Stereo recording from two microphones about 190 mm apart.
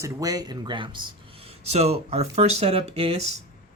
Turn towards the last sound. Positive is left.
turn(degrees=-35)  # may be behind; listen again after turning